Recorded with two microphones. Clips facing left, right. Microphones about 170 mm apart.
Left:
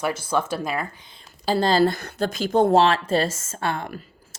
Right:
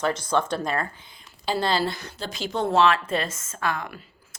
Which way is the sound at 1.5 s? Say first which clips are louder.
Left 5 dB; 40° left (ahead or behind).